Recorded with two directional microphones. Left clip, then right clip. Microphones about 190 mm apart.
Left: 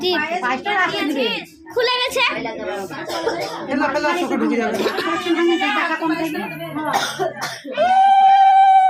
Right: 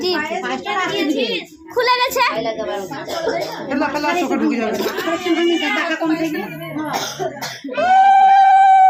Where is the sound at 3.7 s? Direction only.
Centre (ahead or behind).